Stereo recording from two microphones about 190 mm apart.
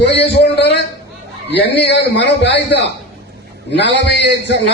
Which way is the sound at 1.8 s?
65° left (ahead or behind).